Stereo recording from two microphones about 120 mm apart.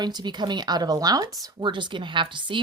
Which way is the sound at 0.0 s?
35° right (ahead or behind).